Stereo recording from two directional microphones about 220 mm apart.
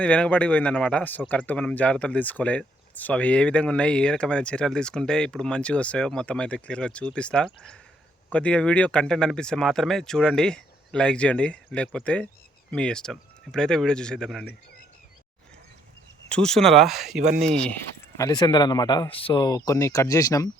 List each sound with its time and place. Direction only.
0.0 s a man's voice: 5° left (ahead or behind)
16.3 s a man's voice: 5° left (ahead or behind)
18.2 s speech: 15° left (ahead or behind)